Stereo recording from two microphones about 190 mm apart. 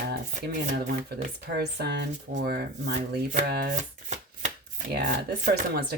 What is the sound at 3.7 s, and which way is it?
Shuffling cards, 40° right (ahead or behind).